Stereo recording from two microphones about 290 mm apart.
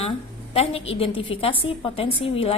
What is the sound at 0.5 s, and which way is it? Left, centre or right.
A woman's voice, left.